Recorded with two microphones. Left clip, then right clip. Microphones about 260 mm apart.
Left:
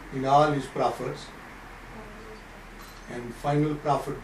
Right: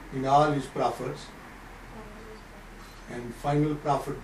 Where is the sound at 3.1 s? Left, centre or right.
Centre.